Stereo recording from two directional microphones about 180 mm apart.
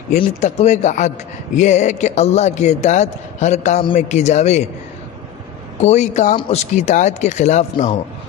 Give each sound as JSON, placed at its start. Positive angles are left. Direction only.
{"t": 0.4, "sound": "a man's voice", "side_deg": 40}
{"t": 5.8, "sound": "a man's voice", "side_deg": 40}